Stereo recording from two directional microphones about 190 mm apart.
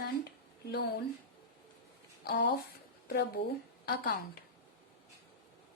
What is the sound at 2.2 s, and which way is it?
A woman's voice, 55° left (ahead or behind).